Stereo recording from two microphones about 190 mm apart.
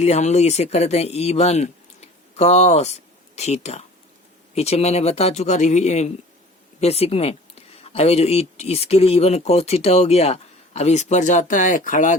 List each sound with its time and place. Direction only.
0.0 s speech: 35° left (ahead or behind)